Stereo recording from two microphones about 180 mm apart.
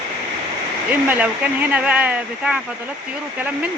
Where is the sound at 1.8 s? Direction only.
5° right (ahead or behind).